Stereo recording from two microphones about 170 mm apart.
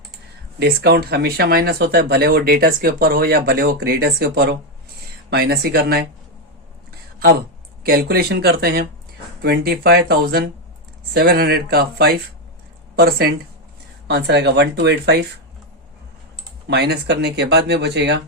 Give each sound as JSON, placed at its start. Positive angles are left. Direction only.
{"t": 0.6, "sound": "speech", "side_deg": -70}
{"t": 7.2, "sound": "speech", "side_deg": -65}
{"t": 14.1, "sound": "speech", "side_deg": -80}
{"t": 16.6, "sound": "speech", "side_deg": -75}